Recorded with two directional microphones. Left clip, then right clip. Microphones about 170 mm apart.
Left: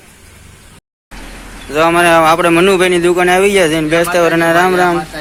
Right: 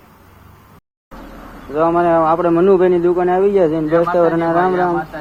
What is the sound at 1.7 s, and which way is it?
A man's voice, 40° left (ahead or behind).